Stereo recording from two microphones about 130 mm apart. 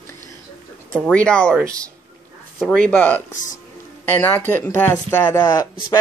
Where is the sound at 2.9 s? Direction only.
10° left (ahead or behind).